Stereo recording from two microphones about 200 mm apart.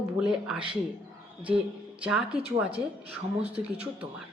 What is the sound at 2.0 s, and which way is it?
A woman's voice, 5° right (ahead or behind).